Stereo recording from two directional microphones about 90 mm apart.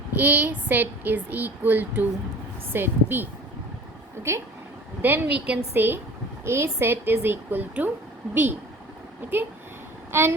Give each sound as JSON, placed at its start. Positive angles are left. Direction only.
{"t": 0.1, "sound": "a woman's voice", "side_deg": -20}
{"t": 4.3, "sound": "a woman's voice", "side_deg": -30}
{"t": 10.1, "sound": "speech", "side_deg": -25}